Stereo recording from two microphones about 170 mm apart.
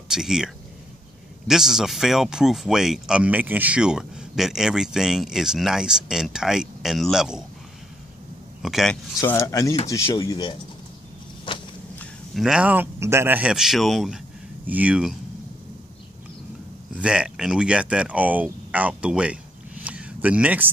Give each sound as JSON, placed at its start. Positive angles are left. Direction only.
{"t": 0.1, "sound": "speech", "side_deg": -5}
{"t": 1.5, "sound": "speech", "side_deg": 0}
{"t": 8.6, "sound": "speech", "side_deg": 0}
{"t": 9.2, "sound": "speech", "side_deg": 15}
{"t": 11.5, "sound": "a sound", "side_deg": 30}
{"t": 12.0, "sound": "a man's voice", "side_deg": 0}
{"t": 16.9, "sound": "speech", "side_deg": -5}
{"t": 19.8, "sound": "a sound", "side_deg": -5}